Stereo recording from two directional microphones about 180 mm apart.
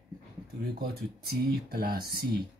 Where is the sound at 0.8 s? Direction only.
60° right (ahead or behind).